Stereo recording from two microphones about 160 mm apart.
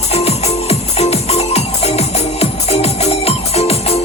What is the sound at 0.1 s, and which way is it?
Music, 40° left (ahead or behind).